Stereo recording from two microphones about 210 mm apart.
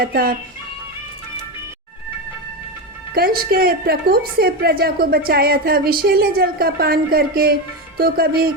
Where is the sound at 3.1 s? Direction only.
45° right (ahead or behind).